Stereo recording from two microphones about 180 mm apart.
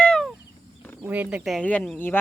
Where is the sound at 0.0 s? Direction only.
Centre (ahead or behind).